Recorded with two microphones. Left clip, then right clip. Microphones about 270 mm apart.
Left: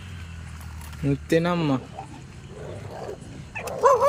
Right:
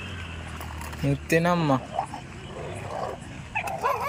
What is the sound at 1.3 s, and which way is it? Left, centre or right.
Speech, centre.